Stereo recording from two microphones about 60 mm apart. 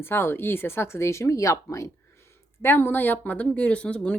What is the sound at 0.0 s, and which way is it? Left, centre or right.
Speech, left.